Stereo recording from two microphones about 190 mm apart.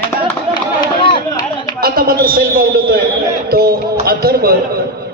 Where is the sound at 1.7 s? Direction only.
50° right (ahead or behind).